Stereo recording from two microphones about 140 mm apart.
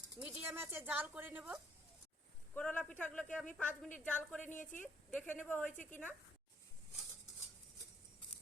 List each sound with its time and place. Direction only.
0.2 s speech: 10° right (ahead or behind)
2.6 s a woman's voice: 10° left (ahead or behind)